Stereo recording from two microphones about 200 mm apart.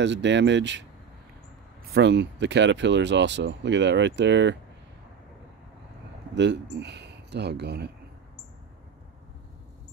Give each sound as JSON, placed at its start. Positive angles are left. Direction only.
{"t": 0.0, "sound": "speech", "side_deg": -60}
{"t": 1.9, "sound": "speech", "side_deg": -60}
{"t": 6.3, "sound": "speech", "side_deg": -60}